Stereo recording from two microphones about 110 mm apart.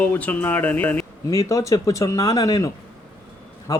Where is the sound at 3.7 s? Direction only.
35° left (ahead or behind).